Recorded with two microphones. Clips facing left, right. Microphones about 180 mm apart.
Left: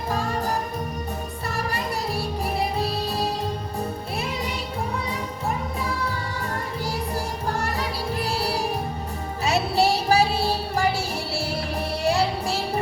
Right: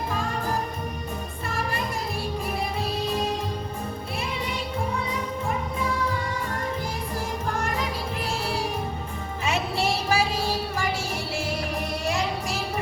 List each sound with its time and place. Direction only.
9.4 s music: 35° left (ahead or behind)